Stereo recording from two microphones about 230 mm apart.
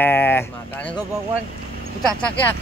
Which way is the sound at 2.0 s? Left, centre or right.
Centre.